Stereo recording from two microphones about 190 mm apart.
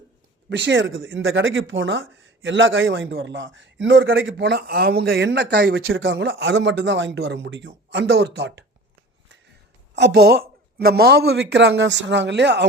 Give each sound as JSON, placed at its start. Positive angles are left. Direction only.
{"t": 0.5, "sound": "speech", "side_deg": -75}
{"t": 4.6, "sound": "speech", "side_deg": -55}
{"t": 7.9, "sound": "speech", "side_deg": -70}
{"t": 9.9, "sound": "speech", "side_deg": -65}